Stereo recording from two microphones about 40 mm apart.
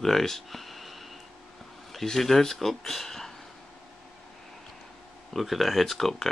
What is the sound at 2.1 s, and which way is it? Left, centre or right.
Speech, centre.